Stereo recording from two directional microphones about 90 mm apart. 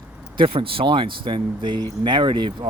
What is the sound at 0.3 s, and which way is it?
Speech, 90° right.